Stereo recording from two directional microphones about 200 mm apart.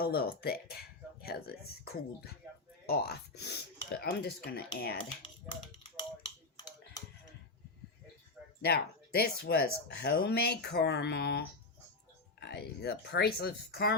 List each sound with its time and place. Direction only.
0.0 s speech: 50° left (ahead or behind)
8.6 s speech: 50° left (ahead or behind)